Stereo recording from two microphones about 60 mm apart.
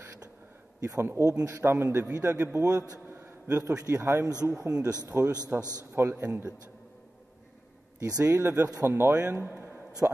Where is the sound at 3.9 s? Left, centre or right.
Right.